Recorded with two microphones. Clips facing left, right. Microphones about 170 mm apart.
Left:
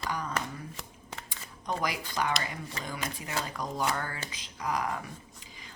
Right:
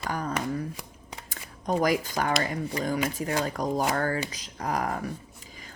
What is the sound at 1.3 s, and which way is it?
A woman's voice, 45° right (ahead or behind).